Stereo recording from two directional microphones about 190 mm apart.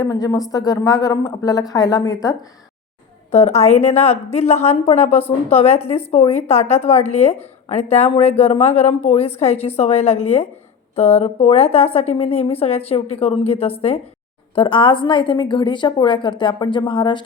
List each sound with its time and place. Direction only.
0.0 s a woman's voice: 20° left (ahead or behind)
3.3 s a woman's voice: 35° left (ahead or behind)